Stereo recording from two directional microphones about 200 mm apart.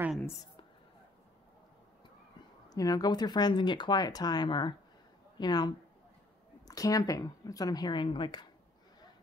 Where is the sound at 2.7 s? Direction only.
20° left (ahead or behind).